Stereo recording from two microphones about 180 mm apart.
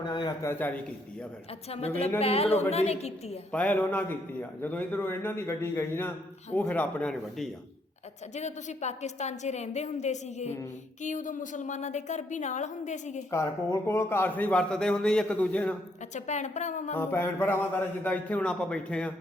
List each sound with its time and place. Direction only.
0.0 s speech: 25° left (ahead or behind)
1.7 s a woman's voice: 35° left (ahead or behind)
3.5 s a man's voice: 10° left (ahead or behind)
8.4 s a woman's voice: 40° left (ahead or behind)
13.3 s a man's voice: 15° left (ahead or behind)
16.1 s a woman's voice: 40° left (ahead or behind)
16.9 s a man's voice: 10° left (ahead or behind)